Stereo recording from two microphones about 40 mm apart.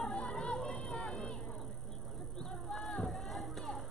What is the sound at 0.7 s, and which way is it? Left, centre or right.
Music, centre.